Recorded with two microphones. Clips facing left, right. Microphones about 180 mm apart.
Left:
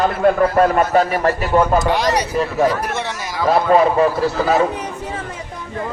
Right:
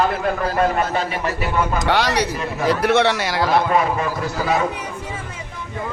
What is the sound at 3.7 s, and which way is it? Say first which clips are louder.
Speech: left 6 dB; 35° left (ahead or behind).